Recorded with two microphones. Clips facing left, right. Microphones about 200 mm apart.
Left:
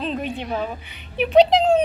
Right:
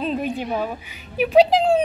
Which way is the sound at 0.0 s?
5° right (ahead or behind).